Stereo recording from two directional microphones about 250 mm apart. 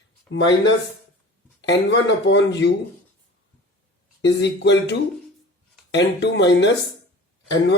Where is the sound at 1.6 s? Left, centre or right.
Left.